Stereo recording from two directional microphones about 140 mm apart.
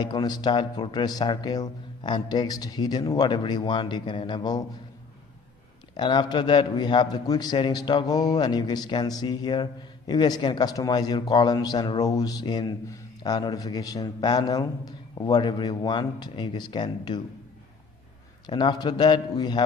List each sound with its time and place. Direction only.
0.0 s speech: 30° left (ahead or behind)
5.9 s a man's voice: 35° left (ahead or behind)
18.5 s speech: 35° left (ahead or behind)